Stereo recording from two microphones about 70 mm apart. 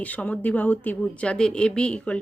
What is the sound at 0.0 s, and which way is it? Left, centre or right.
A woman's voice, left.